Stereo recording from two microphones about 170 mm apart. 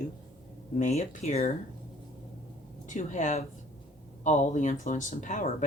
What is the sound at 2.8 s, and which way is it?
Speech, 45° left (ahead or behind).